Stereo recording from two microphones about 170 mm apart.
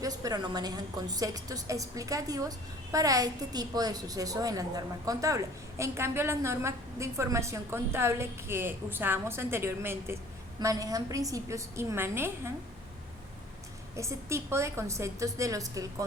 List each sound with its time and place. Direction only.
0.0 s a woman's voice: 20° right (ahead or behind)
13.9 s a woman's voice: 15° right (ahead or behind)